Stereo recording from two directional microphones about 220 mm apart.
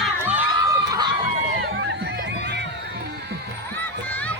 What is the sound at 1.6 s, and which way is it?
Music, 50° right (ahead or behind).